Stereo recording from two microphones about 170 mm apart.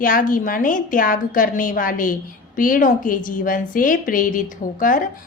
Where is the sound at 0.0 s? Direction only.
55° left (ahead or behind).